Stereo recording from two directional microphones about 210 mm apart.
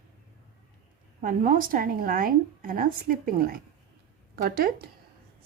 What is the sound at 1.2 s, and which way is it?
A woman's voice, 40° right (ahead or behind).